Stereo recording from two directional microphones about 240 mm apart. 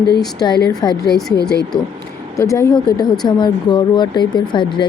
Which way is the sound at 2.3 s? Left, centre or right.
Centre.